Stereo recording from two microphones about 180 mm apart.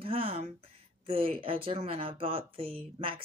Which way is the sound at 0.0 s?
30° right (ahead or behind).